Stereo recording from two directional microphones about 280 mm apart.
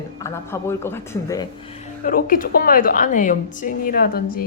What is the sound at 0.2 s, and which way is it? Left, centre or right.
A woman's voice, centre.